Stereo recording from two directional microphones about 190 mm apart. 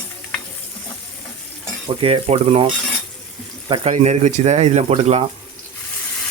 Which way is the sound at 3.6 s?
25° right (ahead or behind).